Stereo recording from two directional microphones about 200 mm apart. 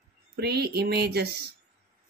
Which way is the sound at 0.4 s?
55° right (ahead or behind).